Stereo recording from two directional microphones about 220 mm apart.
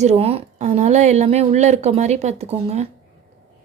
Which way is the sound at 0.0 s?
30° right (ahead or behind).